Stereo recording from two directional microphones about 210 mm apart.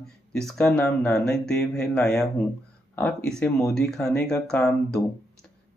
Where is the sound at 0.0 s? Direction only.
Centre (ahead or behind).